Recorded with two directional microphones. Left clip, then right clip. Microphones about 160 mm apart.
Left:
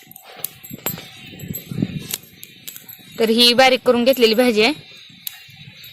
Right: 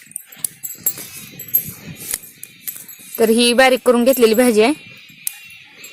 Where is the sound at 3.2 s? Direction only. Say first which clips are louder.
Right 1 dB; 60° right (ahead or behind).